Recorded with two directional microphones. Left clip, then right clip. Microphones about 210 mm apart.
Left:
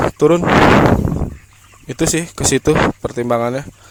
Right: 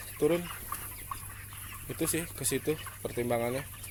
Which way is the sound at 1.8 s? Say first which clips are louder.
Left 16 dB; 50° left (ahead or behind).